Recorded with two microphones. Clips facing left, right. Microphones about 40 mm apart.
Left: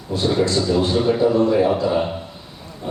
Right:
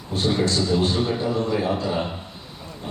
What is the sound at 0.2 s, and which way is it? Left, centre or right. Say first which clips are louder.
A man's voice: left 3 dB; left.